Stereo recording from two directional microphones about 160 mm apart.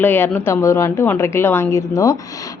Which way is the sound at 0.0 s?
10° left (ahead or behind).